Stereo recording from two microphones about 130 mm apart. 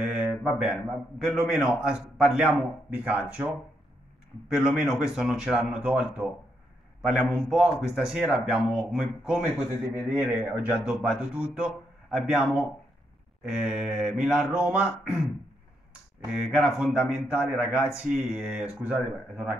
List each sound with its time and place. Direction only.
0.2 s a man's voice: 10° right (ahead or behind)
4.5 s a man's voice: 5° right (ahead or behind)
16.4 s a man's voice: 5° right (ahead or behind)